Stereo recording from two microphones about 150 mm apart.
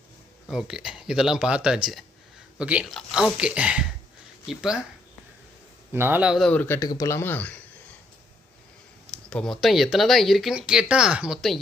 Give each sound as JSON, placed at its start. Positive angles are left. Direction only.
{"t": 0.4, "sound": "speech", "side_deg": -5}
{"t": 5.9, "sound": "speech", "side_deg": -15}
{"t": 6.5, "sound": "speech", "side_deg": 10}
{"t": 6.7, "sound": "speech", "side_deg": 25}
{"t": 9.1, "sound": "speech", "side_deg": 5}